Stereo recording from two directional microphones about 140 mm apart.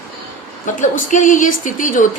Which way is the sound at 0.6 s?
65° left (ahead or behind).